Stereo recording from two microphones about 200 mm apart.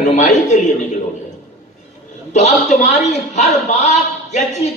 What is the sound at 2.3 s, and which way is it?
A man's voice, 35° left (ahead or behind).